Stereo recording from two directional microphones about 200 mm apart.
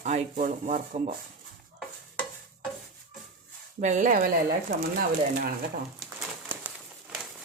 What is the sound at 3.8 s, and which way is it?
Speech, 35° right (ahead or behind).